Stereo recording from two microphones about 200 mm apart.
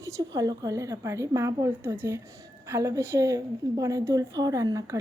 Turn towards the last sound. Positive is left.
turn(degrees=-15)  # may be behind; listen again after turning